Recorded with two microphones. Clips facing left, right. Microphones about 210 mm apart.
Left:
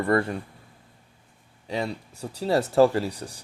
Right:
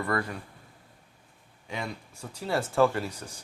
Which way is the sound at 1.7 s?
35° left (ahead or behind).